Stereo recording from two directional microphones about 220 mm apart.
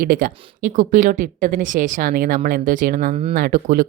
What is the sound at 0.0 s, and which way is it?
Speech, 40° right (ahead or behind).